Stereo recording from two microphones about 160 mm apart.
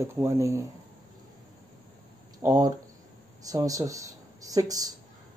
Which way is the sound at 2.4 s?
25° right (ahead or behind).